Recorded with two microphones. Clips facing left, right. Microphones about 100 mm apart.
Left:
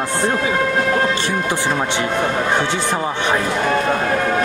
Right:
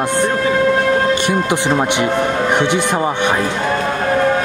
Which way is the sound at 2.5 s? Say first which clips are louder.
Right 4 dB; 15° right (ahead or behind).